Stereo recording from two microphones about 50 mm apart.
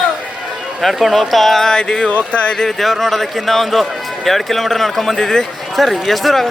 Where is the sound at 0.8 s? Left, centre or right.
Centre.